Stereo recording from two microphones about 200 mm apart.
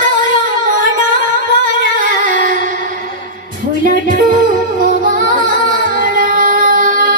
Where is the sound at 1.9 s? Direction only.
40° right (ahead or behind).